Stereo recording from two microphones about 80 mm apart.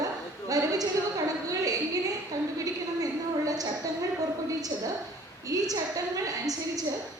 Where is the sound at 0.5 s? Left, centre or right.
Right.